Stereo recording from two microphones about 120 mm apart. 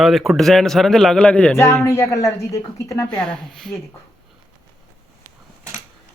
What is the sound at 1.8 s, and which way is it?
Speech, 25° left (ahead or behind).